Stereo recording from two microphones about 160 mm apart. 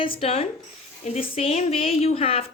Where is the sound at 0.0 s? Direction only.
35° left (ahead or behind).